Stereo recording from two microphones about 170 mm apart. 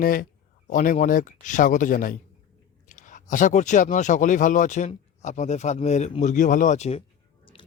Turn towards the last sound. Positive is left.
turn(degrees=30)  # may be behind; listen again after turning